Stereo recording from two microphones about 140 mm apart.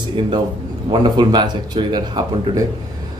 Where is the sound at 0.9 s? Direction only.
30° right (ahead or behind).